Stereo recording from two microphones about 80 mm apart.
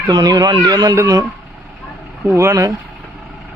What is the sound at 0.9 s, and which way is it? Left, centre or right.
Speech, right.